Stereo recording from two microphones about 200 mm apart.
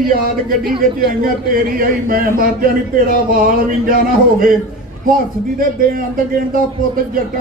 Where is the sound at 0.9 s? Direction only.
45° right (ahead or behind).